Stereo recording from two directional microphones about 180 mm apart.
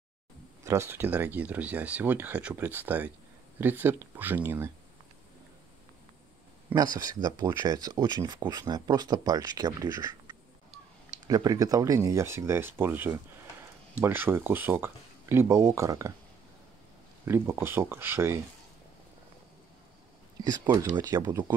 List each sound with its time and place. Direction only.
0.7 s speech: 15° right (ahead or behind)
6.7 s speech: 20° right (ahead or behind)
17.2 s speech: 10° right (ahead or behind)
20.4 s speech: 20° right (ahead or behind)